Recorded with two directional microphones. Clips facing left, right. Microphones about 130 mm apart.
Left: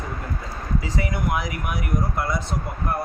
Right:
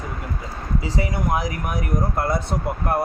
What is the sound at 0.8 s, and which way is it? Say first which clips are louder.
Speech: right 3 dB; 30° right (ahead or behind).